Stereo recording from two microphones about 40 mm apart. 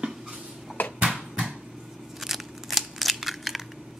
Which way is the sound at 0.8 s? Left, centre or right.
Left.